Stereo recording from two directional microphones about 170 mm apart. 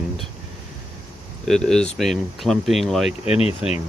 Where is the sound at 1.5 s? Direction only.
5° left (ahead or behind).